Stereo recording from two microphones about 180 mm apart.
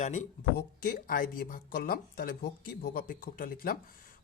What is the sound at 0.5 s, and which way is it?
Speech, 55° left (ahead or behind).